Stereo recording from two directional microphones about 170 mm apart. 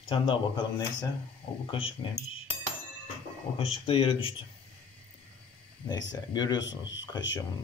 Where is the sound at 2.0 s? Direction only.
30° left (ahead or behind).